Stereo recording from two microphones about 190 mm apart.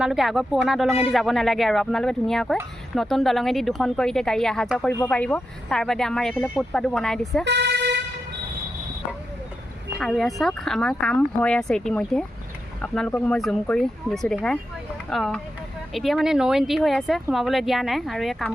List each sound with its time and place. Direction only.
0.0 s speech: centre (ahead or behind)
7.4 s vehicle: 65° right (ahead or behind)
10.0 s speech: centre (ahead or behind)